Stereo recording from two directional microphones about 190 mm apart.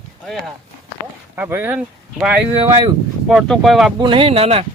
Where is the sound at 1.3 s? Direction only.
10° right (ahead or behind).